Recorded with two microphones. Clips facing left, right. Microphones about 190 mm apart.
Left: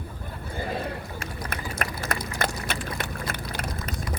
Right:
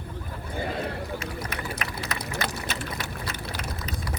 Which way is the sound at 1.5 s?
50° left (ahead or behind).